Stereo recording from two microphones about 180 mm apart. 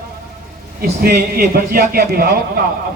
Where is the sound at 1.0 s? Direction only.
55° right (ahead or behind).